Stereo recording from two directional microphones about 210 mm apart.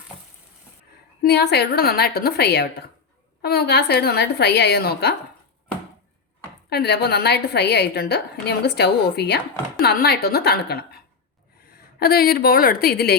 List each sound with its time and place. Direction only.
1.2 s a woman's voice: 50° left (ahead or behind)
6.7 s a woman's voice: 50° left (ahead or behind)